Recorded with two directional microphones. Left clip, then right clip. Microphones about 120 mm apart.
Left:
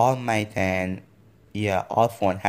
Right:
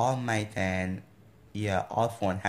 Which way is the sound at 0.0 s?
50° left (ahead or behind).